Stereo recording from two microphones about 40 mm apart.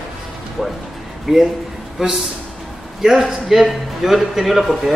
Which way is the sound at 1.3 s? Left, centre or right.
Centre.